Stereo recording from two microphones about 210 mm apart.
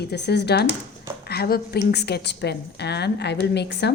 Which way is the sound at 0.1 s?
50° left (ahead or behind).